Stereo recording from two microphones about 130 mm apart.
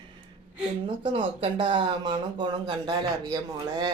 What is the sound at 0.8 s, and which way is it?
Speech, 40° right (ahead or behind).